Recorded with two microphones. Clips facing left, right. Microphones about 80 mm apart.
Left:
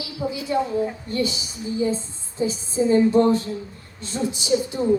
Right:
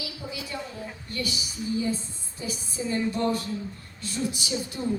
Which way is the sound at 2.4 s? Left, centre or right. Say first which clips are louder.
Left 11 dB; left.